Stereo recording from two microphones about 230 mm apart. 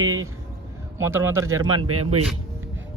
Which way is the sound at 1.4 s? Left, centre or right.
Right.